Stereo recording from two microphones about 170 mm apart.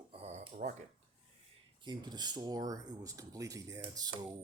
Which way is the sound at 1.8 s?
25° right (ahead or behind).